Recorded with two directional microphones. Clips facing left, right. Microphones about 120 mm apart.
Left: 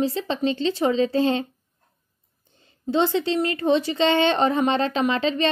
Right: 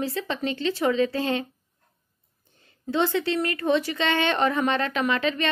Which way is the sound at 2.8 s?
25° left (ahead or behind).